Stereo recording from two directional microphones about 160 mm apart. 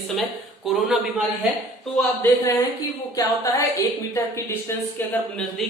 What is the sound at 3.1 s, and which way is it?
Speech, 20° left (ahead or behind).